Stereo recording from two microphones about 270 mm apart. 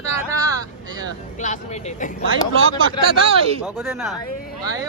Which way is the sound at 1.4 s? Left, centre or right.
Left.